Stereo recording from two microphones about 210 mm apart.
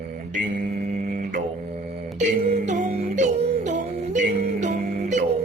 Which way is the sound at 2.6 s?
35° right (ahead or behind).